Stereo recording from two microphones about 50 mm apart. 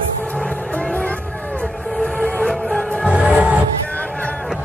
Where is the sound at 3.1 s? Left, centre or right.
Right.